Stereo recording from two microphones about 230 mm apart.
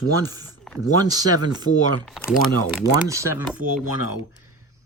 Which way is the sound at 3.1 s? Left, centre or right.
Centre.